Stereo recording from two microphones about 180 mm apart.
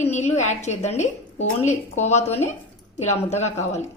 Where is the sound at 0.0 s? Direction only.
40° left (ahead or behind).